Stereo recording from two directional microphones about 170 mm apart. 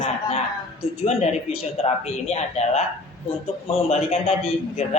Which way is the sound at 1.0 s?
40° left (ahead or behind).